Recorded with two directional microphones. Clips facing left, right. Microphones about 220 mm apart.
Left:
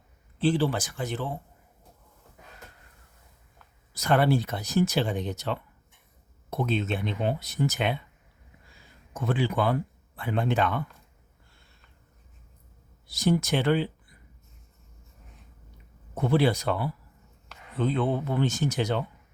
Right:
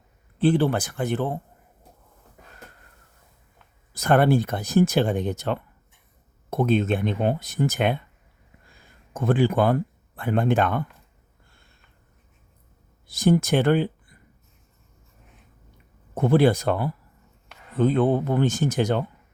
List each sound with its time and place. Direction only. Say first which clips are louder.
0.3 s speech: right 4 dB; 55° right (ahead or behind)
3.9 s speech: right 4 dB; 50° right (ahead or behind)
13.1 s speech: right 5 dB; 50° right (ahead or behind)
16.1 s speech: right 5 dB; 50° right (ahead or behind)